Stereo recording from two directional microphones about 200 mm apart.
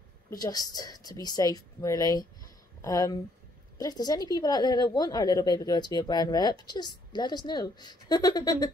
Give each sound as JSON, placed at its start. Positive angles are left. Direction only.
{"t": 0.4, "sound": "a woman's voice", "side_deg": 20}